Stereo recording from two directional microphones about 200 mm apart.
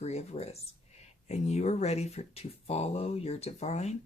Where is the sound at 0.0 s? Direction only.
35° left (ahead or behind).